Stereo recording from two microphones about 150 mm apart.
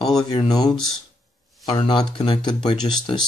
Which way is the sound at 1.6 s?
35° left (ahead or behind).